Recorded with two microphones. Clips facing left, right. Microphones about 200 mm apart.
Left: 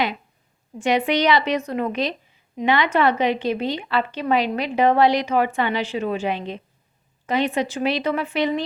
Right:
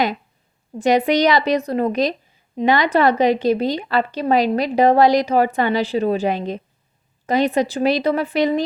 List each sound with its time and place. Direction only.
0.8 s speech: 40° right (ahead or behind)